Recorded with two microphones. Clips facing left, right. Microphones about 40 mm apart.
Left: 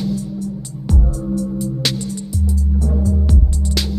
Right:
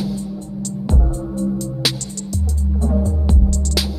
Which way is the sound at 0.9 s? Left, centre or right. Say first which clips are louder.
Left 4 dB; right.